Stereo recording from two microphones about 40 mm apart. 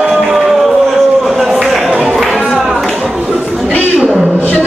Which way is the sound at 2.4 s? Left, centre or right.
Centre.